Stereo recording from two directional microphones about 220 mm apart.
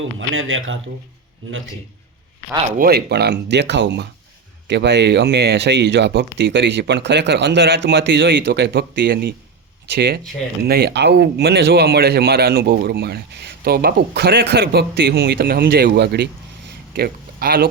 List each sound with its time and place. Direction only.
0.0 s speech: 65° right (ahead or behind)
2.7 s a man's voice: 45° right (ahead or behind)